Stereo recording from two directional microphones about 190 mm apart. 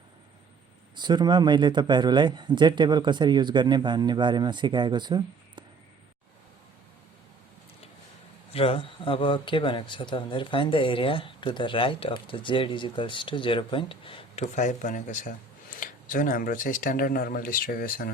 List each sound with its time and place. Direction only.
0.9 s speech: 25° right (ahead or behind)
8.5 s speech: 30° left (ahead or behind)
14.4 s speech: 40° left (ahead or behind)